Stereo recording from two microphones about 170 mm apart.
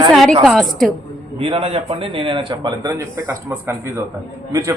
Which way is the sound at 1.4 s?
35° right (ahead or behind).